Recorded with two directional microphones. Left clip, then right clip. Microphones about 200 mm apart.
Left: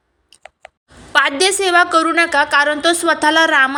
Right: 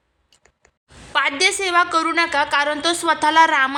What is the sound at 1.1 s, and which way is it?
A woman's voice, 15° left (ahead or behind).